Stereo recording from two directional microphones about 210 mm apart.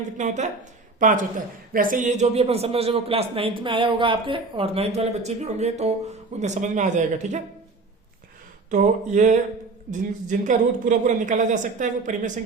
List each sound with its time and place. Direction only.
0.2 s a woman's voice: 35° right (ahead or behind)
8.7 s speech: 35° right (ahead or behind)